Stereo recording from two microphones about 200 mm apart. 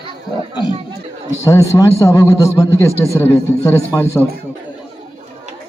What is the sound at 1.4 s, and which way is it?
A man's voice, 15° left (ahead or behind).